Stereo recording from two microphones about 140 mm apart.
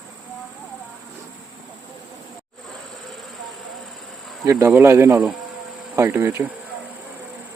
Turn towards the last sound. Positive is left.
turn(degrees=-15)  # may be behind; listen again after turning